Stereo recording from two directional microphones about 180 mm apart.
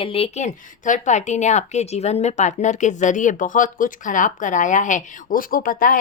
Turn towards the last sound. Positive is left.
turn(degrees=50)  # may be behind; listen again after turning